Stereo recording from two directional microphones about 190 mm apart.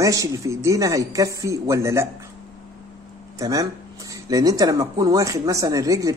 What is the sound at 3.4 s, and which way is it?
A man's voice, 20° right (ahead or behind).